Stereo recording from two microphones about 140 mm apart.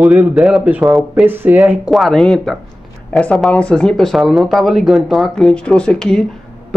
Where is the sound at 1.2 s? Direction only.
15° right (ahead or behind).